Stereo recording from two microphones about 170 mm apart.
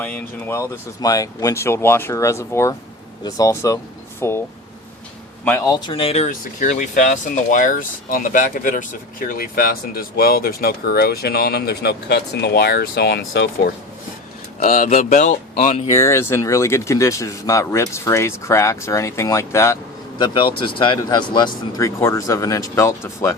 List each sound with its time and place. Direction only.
0.0 s speech: 10° left (ahead or behind)
5.5 s speech: 15° left (ahead or behind); by 6.2 s 35° left (ahead or behind)
6.2 s speech: 50° left (ahead or behind); by 13.5 s 90° left
14.6 s speech: 50° left (ahead or behind)
16.0 s speech: 15° left (ahead or behind)